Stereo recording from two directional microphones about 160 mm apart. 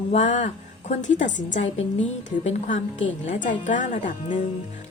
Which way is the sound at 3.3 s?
55° left (ahead or behind).